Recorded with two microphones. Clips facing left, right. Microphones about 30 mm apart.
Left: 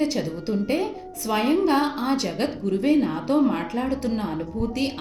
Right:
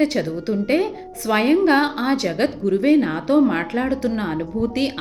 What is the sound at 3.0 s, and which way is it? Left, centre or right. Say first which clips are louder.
Speech: right 4 dB; right.